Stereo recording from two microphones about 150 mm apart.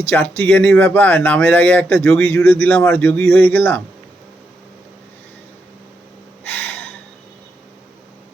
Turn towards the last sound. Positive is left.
turn(degrees=10)  # may be behind; listen again after turning